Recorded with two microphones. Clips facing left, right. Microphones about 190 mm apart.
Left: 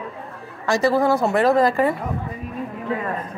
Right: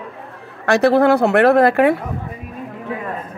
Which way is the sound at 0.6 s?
65° right (ahead or behind).